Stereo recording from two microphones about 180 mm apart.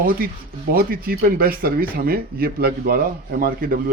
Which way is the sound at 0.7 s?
55° right (ahead or behind).